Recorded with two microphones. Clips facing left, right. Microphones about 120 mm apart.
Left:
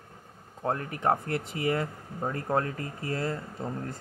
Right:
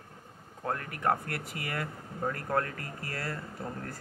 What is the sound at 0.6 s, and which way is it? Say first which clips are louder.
Speech: left 4 dB; 25° left (ahead or behind).